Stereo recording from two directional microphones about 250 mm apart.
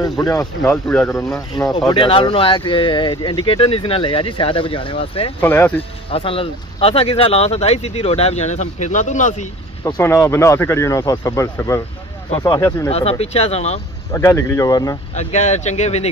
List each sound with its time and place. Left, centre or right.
0.2 s speech: centre
1.9 s speech: left
5.4 s speech: centre
5.8 s speech: left
9.8 s speech: centre
12.9 s speech: left
14.1 s speech: centre
15.1 s speech: left